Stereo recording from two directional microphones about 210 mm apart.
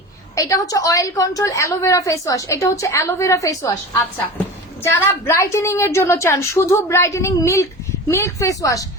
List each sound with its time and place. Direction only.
0.3 s a woman's voice: 15° left (ahead or behind)